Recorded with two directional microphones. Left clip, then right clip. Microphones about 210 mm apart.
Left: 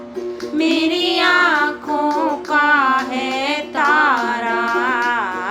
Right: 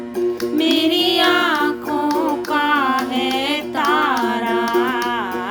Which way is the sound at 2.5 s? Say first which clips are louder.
Left 4 dB; 20° right (ahead or behind).